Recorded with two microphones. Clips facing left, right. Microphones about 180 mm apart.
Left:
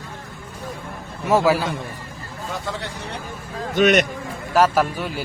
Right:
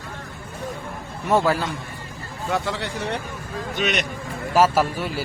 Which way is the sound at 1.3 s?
10° left (ahead or behind).